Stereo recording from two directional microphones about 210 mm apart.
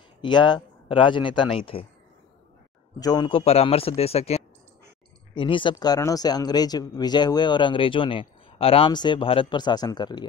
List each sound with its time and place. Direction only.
0.2 s speech: 20° left (ahead or behind)
3.0 s speech: 20° left (ahead or behind)